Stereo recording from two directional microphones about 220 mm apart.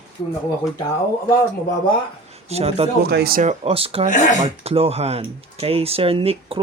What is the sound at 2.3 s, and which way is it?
Speech, 30° right (ahead or behind).